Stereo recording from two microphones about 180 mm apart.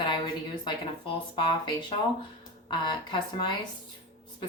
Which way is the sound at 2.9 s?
25° left (ahead or behind).